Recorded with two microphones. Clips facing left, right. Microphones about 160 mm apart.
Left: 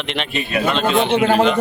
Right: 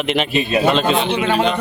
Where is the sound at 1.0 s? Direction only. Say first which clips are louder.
Left 3 dB; 55° left (ahead or behind).